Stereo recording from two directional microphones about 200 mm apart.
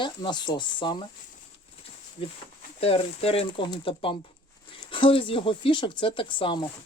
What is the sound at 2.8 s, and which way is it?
Speech, 30° left (ahead or behind).